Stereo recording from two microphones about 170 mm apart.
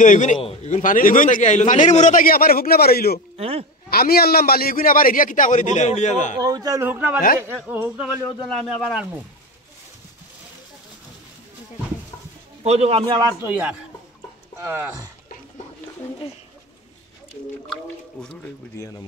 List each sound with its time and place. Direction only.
0.0 s a man's voice: 45° left (ahead or behind)
0.4 s a man's voice: 35° left (ahead or behind); by 3.2 s 65° left (ahead or behind)
3.3 s speech: 35° right (ahead or behind)
3.9 s a man's voice: 65° left (ahead or behind); by 6.3 s 45° left (ahead or behind)
6.4 s a man's voice: 20° right (ahead or behind); by 9.2 s 5° right (ahead or behind)
12.6 s a man's voice: 35° right (ahead or behind)
13.4 s a man's voice: 10° right (ahead or behind)